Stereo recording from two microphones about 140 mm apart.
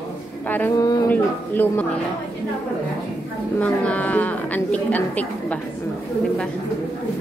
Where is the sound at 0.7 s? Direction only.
30° left (ahead or behind).